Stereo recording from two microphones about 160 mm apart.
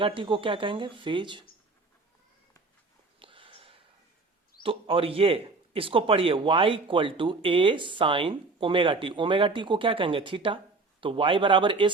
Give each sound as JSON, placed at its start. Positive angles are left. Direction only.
{"t": 0.0, "sound": "a man's voice", "side_deg": -30}
{"t": 3.2, "sound": "a sound", "side_deg": -35}
{"t": 4.6, "sound": "a man's voice", "side_deg": -35}